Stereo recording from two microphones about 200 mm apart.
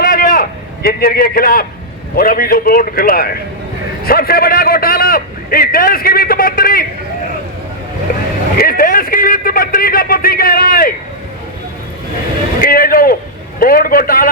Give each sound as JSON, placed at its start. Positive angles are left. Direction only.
{"t": 0.0, "sound": "a sound", "side_deg": 50}
{"t": 2.1, "sound": "a man's voice", "side_deg": 45}
{"t": 8.5, "sound": "a man's voice", "side_deg": 45}
{"t": 12.5, "sound": "vehicle", "side_deg": 45}
{"t": 13.6, "sound": "a man's voice", "side_deg": 45}